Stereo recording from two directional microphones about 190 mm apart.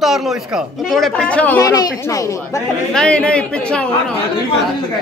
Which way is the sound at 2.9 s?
5° left (ahead or behind).